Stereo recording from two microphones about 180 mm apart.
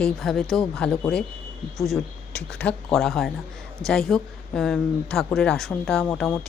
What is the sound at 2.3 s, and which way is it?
Speech, 5° left (ahead or behind).